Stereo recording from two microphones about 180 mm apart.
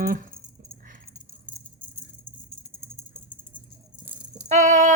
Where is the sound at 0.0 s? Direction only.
50° right (ahead or behind).